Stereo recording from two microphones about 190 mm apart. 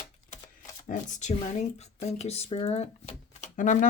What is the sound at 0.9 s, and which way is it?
Speech, 40° left (ahead or behind).